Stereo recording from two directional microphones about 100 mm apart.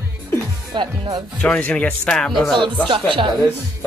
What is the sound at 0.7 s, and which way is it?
Speech, 45° right (ahead or behind).